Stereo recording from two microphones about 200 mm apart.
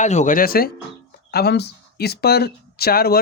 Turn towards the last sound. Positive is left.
turn(degrees=50)  # may be behind; listen again after turning